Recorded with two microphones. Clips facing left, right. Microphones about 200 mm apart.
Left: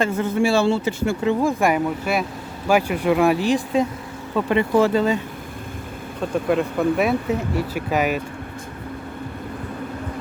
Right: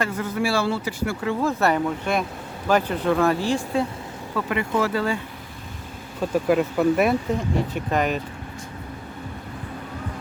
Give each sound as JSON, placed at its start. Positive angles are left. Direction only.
{"t": 0.0, "sound": "speech", "side_deg": 25}
{"t": 4.4, "sound": "speech", "side_deg": 25}
{"t": 6.3, "sound": "speech", "side_deg": 0}